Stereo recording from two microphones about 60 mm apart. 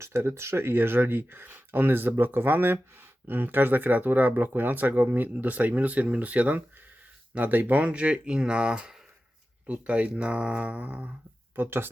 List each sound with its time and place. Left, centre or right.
0.0 s speech: right
11.5 s speech: right